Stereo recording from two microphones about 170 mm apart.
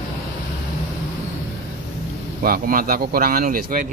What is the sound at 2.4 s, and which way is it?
Speech, 60° right (ahead or behind).